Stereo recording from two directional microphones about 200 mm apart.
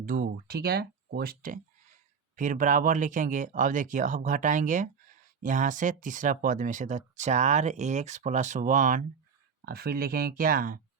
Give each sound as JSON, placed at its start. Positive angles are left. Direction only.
{"t": 0.0, "sound": "speech", "side_deg": -45}
{"t": 9.6, "sound": "speech", "side_deg": -50}